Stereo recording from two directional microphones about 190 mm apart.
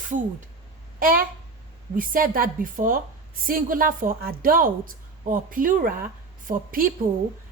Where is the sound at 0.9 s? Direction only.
50° right (ahead or behind).